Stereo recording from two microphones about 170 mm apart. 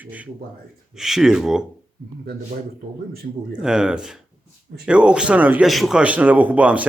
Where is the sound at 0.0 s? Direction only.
10° right (ahead or behind).